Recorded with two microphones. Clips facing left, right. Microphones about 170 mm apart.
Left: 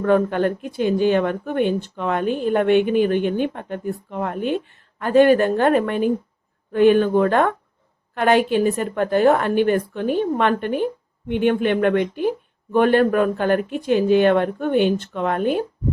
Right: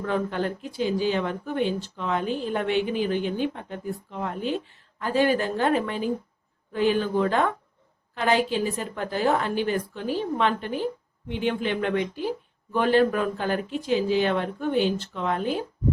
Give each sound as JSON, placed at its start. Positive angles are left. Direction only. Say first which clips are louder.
{"t": 0.0, "sound": "a woman's voice", "louder": "left 9 dB", "side_deg": 55}